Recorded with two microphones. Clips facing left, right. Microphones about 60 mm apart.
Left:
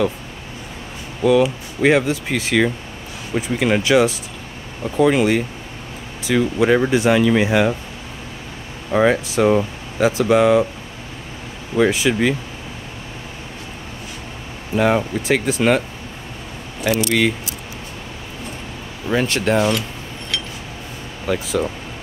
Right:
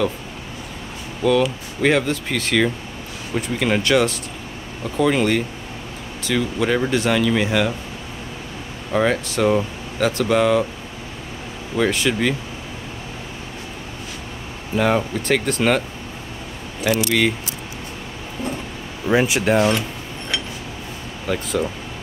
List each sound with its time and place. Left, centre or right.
1.2 s speech: centre
8.9 s speech: centre
11.7 s speech: centre
14.8 s speech: centre
19.0 s speech: centre
21.3 s speech: centre